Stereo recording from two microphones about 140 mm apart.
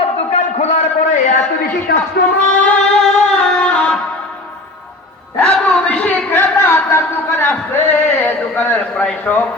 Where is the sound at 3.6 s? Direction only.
10° left (ahead or behind).